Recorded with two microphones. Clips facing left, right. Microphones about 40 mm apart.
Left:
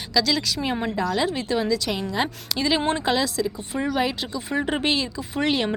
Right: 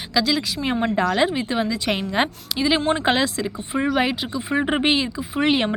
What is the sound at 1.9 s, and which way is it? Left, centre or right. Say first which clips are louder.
A woman's voice: right 4 dB; right.